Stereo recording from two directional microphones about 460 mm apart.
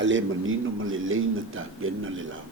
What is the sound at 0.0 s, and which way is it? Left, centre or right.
Speech, right.